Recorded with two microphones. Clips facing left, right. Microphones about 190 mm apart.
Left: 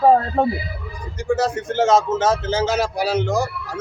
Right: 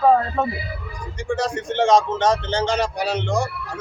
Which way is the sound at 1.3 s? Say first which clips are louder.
Left 3 dB; 5° left (ahead or behind).